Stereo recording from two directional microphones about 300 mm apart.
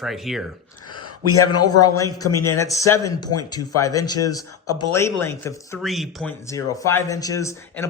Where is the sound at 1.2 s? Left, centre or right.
Left.